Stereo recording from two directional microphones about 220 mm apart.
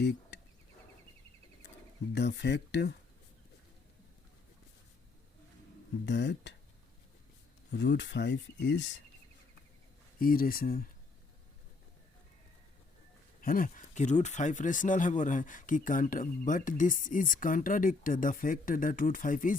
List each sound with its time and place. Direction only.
0.0 s a sound: 50° left (ahead or behind)
2.1 s speech: 50° left (ahead or behind)
6.1 s speech: 55° left (ahead or behind)
7.7 s speech: 50° left (ahead or behind)
10.2 s speech: 40° left (ahead or behind)
13.4 s speech: 40° left (ahead or behind)